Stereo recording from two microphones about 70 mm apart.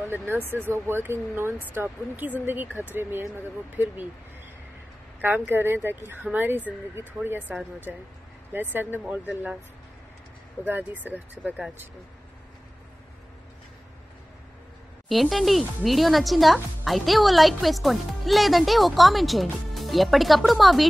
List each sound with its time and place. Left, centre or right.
0.3 s speech: right
5.5 s speech: right
8.5 s speech: right
10.6 s speech: right
15.0 s speech: centre